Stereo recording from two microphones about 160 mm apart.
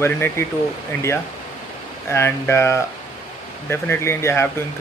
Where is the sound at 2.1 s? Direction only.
15° left (ahead or behind).